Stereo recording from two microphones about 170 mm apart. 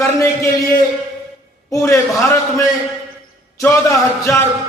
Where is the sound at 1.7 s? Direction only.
15° left (ahead or behind).